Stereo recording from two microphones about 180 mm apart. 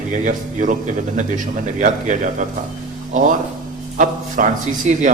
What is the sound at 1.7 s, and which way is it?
A man's voice, 45° right (ahead or behind).